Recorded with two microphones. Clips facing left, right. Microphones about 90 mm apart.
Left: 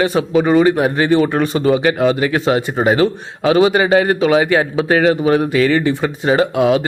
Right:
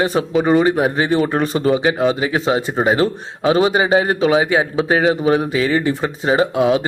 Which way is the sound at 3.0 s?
25° right (ahead or behind).